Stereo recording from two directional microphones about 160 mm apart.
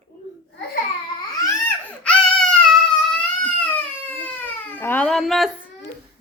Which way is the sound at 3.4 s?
10° left (ahead or behind).